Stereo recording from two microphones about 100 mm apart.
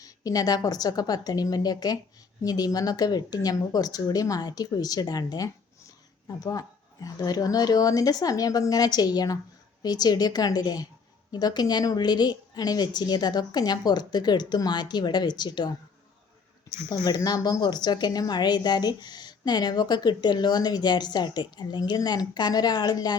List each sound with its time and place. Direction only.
0.0 s a woman's voice: 40° left (ahead or behind)
16.9 s a woman's voice: 40° left (ahead or behind)